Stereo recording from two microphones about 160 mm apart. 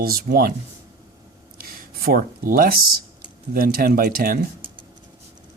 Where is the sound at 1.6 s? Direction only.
70° right (ahead or behind).